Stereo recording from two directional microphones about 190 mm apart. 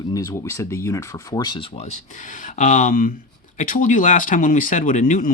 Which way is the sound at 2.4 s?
45° left (ahead or behind).